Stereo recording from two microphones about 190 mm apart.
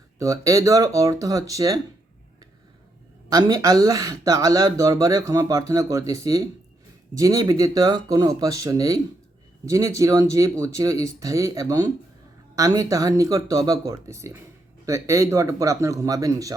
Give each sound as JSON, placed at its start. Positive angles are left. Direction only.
{"t": 0.2, "sound": "speech", "side_deg": -15}
{"t": 3.2, "sound": "speech", "side_deg": -20}